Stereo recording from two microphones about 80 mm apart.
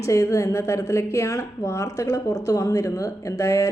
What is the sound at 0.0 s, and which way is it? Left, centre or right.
A woman's voice, left.